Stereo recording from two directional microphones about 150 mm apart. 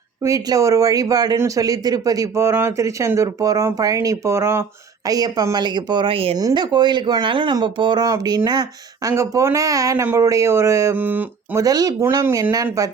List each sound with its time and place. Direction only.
0.2 s speech: 20° right (ahead or behind); by 6.3 s 40° right (ahead or behind)
6.3 s speech: 30° right (ahead or behind); by 11.6 s 10° right (ahead or behind)
11.6 s speech: 25° right (ahead or behind)